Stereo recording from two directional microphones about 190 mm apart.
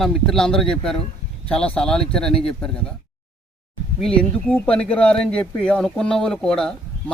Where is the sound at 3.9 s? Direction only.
5° left (ahead or behind).